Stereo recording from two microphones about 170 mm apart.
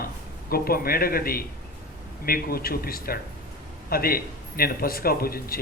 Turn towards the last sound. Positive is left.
turn(degrees=60)  # may be behind; listen again after turning